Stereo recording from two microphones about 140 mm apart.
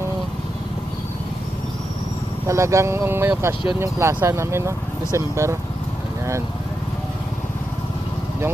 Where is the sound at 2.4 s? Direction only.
20° right (ahead or behind).